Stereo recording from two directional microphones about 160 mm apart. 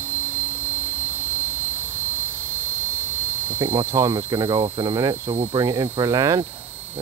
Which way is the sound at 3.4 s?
15° right (ahead or behind).